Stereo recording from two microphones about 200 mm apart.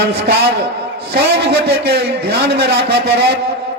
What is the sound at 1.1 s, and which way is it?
A man's voice, 50° right (ahead or behind).